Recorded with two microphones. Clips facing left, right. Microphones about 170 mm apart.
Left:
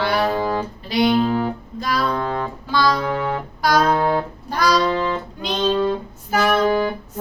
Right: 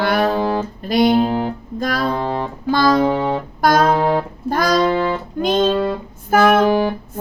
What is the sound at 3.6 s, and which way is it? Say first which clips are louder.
Music: right 3 dB; 50° right (ahead or behind).